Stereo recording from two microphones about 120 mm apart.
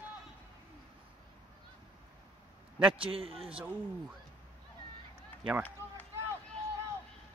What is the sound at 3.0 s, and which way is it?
Speech, 50° right (ahead or behind).